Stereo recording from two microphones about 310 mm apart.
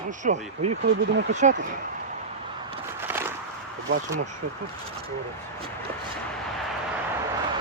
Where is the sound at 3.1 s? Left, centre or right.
Centre.